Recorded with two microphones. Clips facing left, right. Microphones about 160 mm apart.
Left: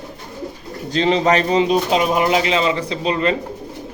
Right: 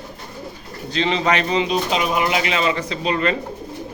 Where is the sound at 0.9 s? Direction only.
40° left (ahead or behind).